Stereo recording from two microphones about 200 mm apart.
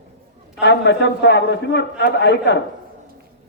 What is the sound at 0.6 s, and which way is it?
A man's voice, 60° left (ahead or behind).